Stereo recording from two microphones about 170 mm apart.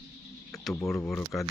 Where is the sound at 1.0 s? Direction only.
5° left (ahead or behind).